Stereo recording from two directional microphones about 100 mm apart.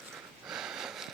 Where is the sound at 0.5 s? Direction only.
5° right (ahead or behind).